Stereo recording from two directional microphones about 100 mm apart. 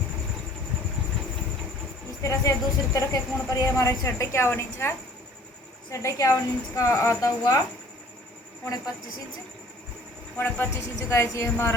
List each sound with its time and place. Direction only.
2.2 s a woman's voice: 30° left (ahead or behind)
10.3 s speech: 25° left (ahead or behind)